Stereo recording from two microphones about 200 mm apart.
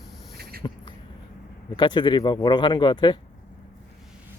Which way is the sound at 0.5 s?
50° right (ahead or behind).